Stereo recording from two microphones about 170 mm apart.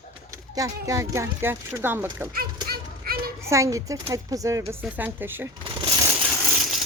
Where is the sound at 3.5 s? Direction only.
20° right (ahead or behind).